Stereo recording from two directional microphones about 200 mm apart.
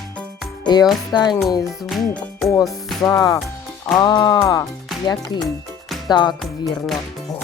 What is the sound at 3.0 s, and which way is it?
Speech, 15° left (ahead or behind).